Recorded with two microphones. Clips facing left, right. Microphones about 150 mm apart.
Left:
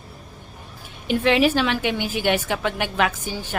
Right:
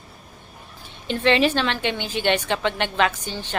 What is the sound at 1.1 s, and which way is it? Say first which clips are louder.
Speech: left 1 dB; 10° left (ahead or behind).